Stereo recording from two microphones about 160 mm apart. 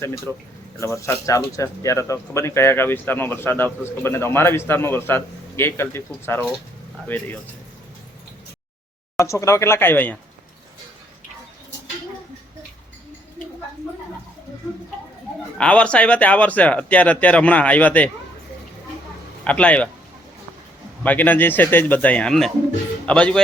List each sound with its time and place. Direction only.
0.0 s speech: 15° left (ahead or behind)
7.1 s speech: 10° left (ahead or behind)
9.1 s speech: 20° left (ahead or behind)
15.5 s speech: 5° left (ahead or behind)
19.5 s speech: 10° left (ahead or behind)
21.0 s speech: 10° left (ahead or behind)